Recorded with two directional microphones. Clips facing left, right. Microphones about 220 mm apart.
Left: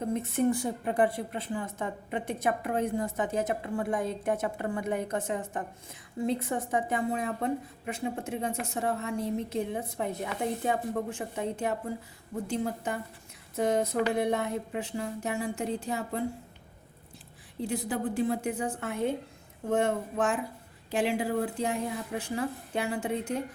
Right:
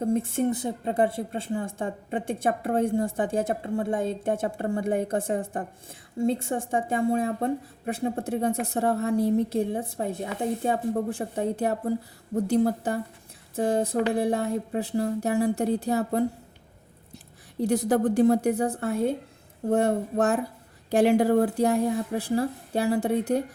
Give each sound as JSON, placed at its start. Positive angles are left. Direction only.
{"t": 0.1, "sound": "a woman's voice", "side_deg": -30}
{"t": 18.2, "sound": "a woman's voice", "side_deg": -40}